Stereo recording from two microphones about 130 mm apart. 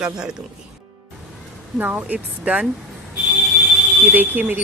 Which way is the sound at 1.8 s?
10° right (ahead or behind).